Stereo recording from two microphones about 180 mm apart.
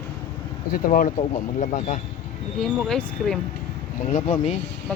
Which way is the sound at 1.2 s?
40° left (ahead or behind).